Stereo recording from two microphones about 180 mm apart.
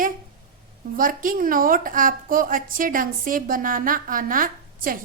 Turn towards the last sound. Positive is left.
turn(degrees=-50)  # may be behind; listen again after turning